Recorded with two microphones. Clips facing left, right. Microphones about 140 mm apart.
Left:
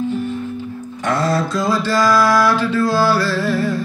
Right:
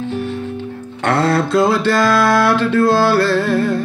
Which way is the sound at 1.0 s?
65° right (ahead or behind).